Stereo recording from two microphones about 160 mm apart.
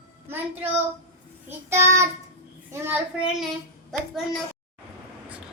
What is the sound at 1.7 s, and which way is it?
Child singing, 15° right (ahead or behind).